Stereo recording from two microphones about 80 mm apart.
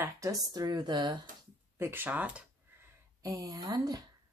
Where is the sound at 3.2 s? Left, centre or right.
Right.